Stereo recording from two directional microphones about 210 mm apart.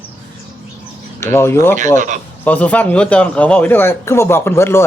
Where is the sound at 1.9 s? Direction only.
40° right (ahead or behind).